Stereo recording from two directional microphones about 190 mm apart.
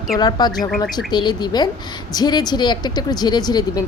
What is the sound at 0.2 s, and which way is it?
A woman's voice, 20° left (ahead or behind).